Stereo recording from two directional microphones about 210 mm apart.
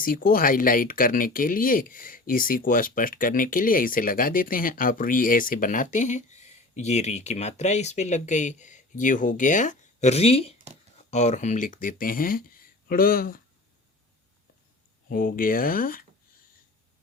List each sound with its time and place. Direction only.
0.0 s speech: 45° left (ahead or behind)
15.1 s speech: 40° left (ahead or behind)